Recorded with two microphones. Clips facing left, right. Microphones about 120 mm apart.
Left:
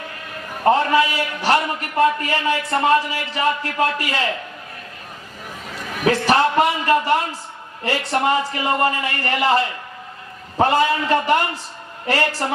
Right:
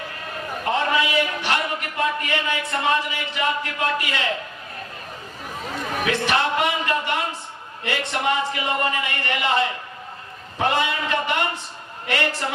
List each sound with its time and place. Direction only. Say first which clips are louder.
0.6 s a man's voice: left 6 dB; 40° left (ahead or behind)
6.1 s a man's voice: left 6 dB; 40° left (ahead or behind)